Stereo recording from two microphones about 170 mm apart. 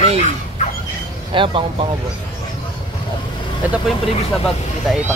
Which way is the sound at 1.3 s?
30° right (ahead or behind).